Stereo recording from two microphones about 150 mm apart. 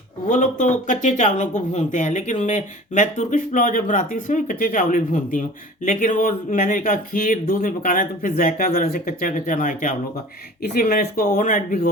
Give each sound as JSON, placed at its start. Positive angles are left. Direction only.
{"t": 0.3, "sound": "speech", "side_deg": 60}
{"t": 10.6, "sound": "speech", "side_deg": 75}